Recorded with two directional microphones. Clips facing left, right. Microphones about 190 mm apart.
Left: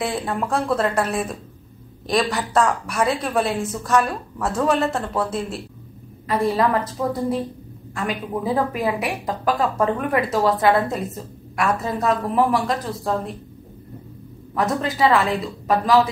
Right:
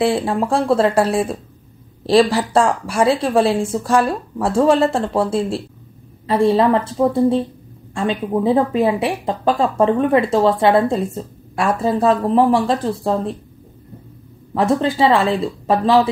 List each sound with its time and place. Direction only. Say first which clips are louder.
0.0 s speech: right 7 dB; 30° right (ahead or behind)
14.5 s speech: right 6 dB; 30° right (ahead or behind)